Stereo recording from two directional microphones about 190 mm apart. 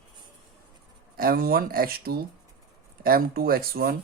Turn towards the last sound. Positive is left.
turn(degrees=-50)  # may be behind; listen again after turning